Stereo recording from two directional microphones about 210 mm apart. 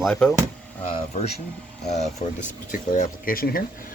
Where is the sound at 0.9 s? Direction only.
30° left (ahead or behind).